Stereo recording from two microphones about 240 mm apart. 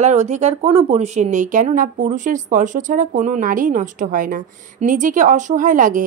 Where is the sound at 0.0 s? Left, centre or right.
Right.